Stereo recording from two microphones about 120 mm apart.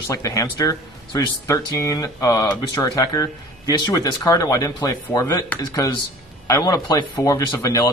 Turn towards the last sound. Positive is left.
turn(degrees=30)  # may be behind; listen again after turning